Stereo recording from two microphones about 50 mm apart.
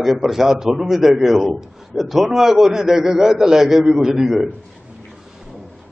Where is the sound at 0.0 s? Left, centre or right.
Centre.